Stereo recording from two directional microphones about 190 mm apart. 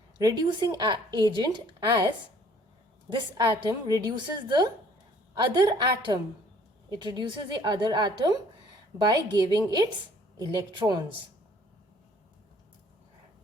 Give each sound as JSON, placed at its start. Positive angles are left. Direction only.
{"t": 0.2, "sound": "speech", "side_deg": -20}
{"t": 3.1, "sound": "speech", "side_deg": -20}